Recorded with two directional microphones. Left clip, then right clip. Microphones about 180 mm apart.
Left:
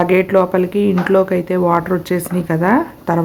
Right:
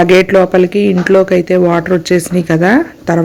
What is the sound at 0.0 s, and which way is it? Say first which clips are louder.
Speech: right 5 dB; 25° right (ahead or behind).